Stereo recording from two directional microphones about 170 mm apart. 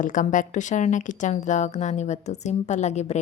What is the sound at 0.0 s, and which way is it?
A woman's voice, 50° left (ahead or behind).